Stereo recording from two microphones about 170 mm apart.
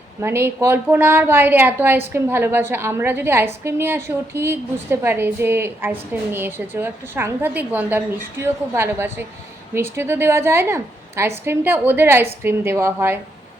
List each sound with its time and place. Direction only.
0.2 s a woman's voice: 15° right (ahead or behind)